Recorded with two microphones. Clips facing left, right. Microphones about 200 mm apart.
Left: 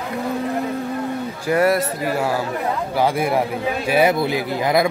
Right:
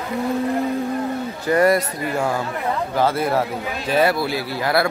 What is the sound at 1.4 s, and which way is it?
A man's voice, 5° left (ahead or behind).